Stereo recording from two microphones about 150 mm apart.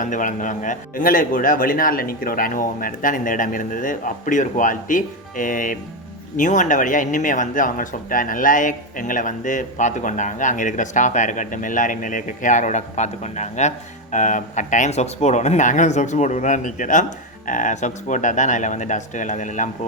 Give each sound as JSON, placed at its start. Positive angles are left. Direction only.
{"t": 0.0, "sound": "a man's voice", "side_deg": 60}